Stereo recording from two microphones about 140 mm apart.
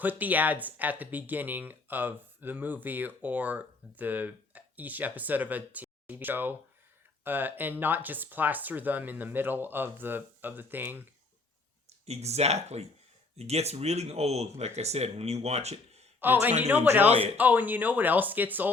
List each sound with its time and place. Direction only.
0.0 s speech: 10° right (ahead or behind)
11.9 s speech: 50° right (ahead or behind)
16.2 s speech: 15° right (ahead or behind)